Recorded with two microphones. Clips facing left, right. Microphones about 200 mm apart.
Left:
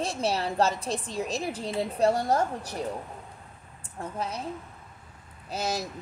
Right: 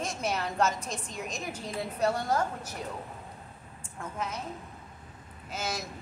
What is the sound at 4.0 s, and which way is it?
Speech, 35° left (ahead or behind).